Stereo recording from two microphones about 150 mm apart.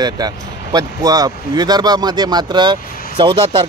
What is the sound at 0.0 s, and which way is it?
Speech, 25° right (ahead or behind).